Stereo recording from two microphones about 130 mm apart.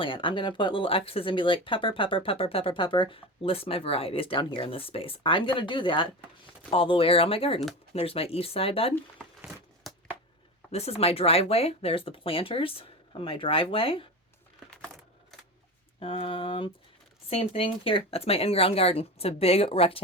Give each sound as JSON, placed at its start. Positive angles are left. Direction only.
{"t": 0.0, "sound": "speech", "side_deg": 40}
{"t": 9.5, "sound": "a sound", "side_deg": -5}
{"t": 10.7, "sound": "speech", "side_deg": 50}
{"t": 16.0, "sound": "speech", "side_deg": 45}